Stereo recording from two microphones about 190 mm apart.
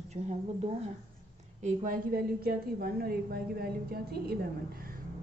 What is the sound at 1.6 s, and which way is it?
A woman's voice, 45° right (ahead or behind).